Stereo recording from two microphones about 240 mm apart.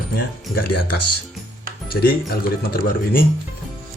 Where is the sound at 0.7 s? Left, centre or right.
Left.